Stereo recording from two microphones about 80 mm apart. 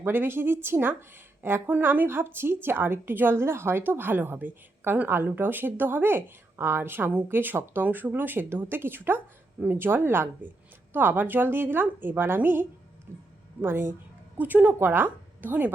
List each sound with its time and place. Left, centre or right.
0.0 s a woman's voice: right